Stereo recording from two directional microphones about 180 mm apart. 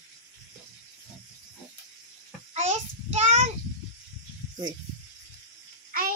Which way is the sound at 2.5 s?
40° right (ahead or behind).